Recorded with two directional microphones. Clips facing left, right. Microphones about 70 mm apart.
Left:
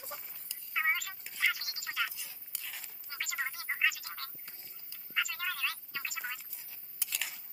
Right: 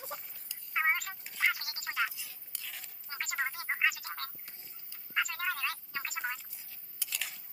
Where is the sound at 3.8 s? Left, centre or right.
Right.